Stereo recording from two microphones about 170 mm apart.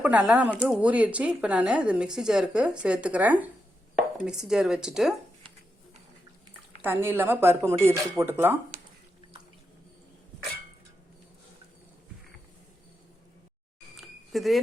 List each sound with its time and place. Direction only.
0.0 s a woman's voice: 5° right (ahead or behind)
6.8 s a woman's voice: 15° right (ahead or behind)
13.9 s a sound: centre (ahead or behind)